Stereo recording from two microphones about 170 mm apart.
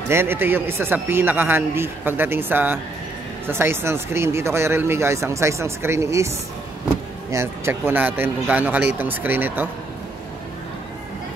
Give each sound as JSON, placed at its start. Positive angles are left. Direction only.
{"t": 0.1, "sound": "speech", "side_deg": -15}